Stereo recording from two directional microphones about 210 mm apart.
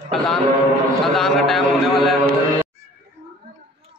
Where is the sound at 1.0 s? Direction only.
Centre (ahead or behind).